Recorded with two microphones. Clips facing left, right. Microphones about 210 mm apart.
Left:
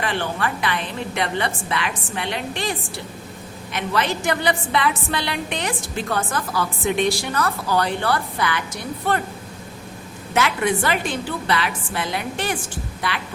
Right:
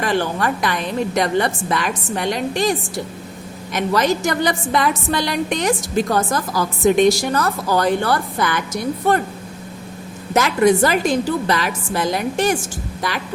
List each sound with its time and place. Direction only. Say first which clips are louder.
0.0 s a woman's voice: right 5 dB; 40° right (ahead or behind)
10.3 s a woman's voice: right 6 dB; 40° right (ahead or behind)